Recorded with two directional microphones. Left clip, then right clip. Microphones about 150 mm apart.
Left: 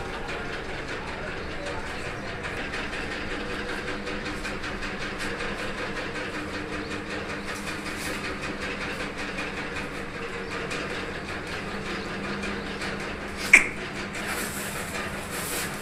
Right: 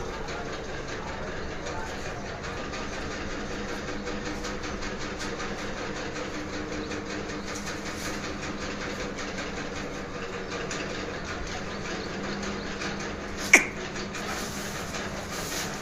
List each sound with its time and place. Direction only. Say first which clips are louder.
13.5 s finger snapping: left 2 dB; 15° right (ahead or behind)